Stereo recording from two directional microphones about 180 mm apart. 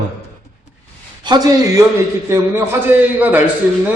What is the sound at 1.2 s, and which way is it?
A man's voice, 20° right (ahead or behind).